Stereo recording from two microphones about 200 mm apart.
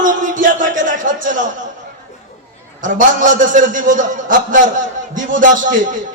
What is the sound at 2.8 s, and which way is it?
A man's voice, 40° right (ahead or behind).